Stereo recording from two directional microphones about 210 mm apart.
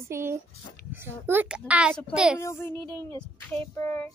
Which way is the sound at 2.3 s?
10° left (ahead or behind).